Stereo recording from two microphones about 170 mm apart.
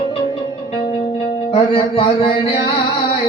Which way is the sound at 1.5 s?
30° left (ahead or behind).